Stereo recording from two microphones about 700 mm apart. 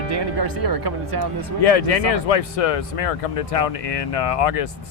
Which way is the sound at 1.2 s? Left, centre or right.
Left.